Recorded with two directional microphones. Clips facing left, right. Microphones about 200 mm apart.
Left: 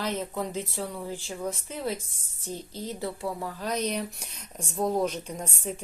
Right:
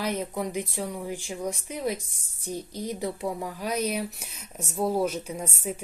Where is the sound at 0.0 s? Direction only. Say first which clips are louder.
Right 1 dB; 15° right (ahead or behind).